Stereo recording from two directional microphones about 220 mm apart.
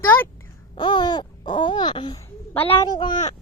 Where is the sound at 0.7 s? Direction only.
20° left (ahead or behind).